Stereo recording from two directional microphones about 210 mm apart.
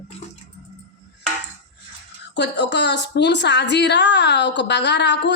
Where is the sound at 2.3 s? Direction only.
55° left (ahead or behind).